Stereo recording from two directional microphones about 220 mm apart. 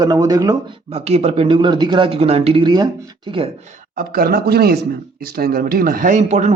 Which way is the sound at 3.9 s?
45° right (ahead or behind).